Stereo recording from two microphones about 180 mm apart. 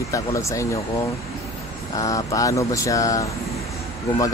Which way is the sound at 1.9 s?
20° left (ahead or behind).